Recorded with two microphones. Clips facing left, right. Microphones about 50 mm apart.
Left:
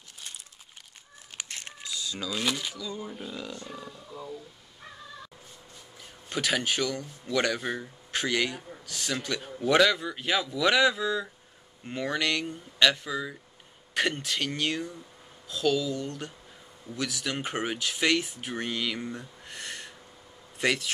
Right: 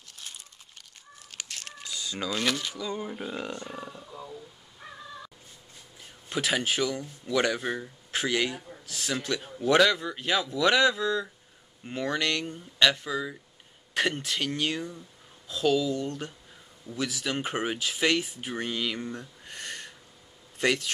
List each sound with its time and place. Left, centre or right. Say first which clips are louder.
2.0 s a sound: right 2 dB; right
2.3 s speech: right 1 dB; centre
2.8 s speech: right 3 dB; right
3.1 s speech: right 3 dB; right
4.0 s speech: left 2 dB; centre
6.2 s speech: right 1 dB; centre
9.5 s speech: even; centre
19.1 s speech: even; centre